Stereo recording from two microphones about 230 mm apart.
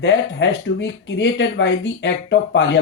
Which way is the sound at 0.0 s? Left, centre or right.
Left.